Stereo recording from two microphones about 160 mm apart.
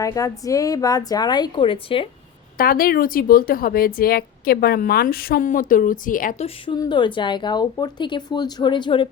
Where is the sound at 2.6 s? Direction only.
65° left (ahead or behind).